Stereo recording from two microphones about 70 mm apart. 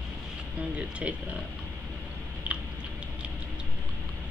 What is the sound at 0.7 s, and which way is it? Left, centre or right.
Speech, centre.